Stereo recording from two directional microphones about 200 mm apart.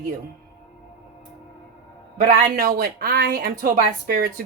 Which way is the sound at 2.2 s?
50° right (ahead or behind).